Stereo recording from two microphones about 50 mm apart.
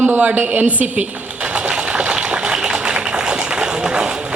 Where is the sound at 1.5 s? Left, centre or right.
Right.